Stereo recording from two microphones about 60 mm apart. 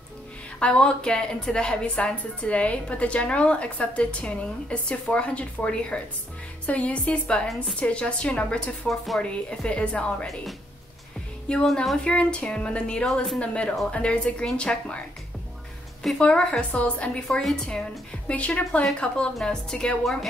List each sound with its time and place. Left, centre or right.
0.6 s a woman's voice: centre
8.8 s speech: centre
9.2 s a woman's voice: centre
11.6 s speech: centre
12.0 s a woman's voice: centre
16.2 s a woman's voice: centre
17.3 s speech: centre
18.3 s a woman's voice: left